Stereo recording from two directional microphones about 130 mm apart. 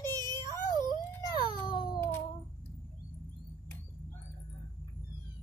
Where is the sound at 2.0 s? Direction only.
15° left (ahead or behind).